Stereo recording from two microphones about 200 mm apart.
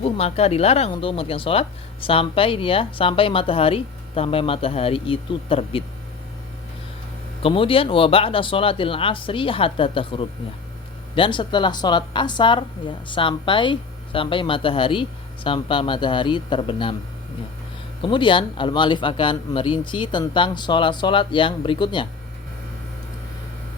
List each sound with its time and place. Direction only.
0.0 s speech: 30° left (ahead or behind)
7.4 s speech: 25° left (ahead or behind)
18.0 s speech: 25° left (ahead or behind)